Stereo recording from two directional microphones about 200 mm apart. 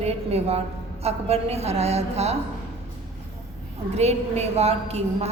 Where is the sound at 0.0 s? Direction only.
30° right (ahead or behind).